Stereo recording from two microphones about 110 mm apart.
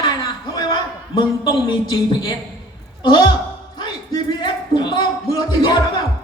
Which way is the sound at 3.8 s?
40° left (ahead or behind).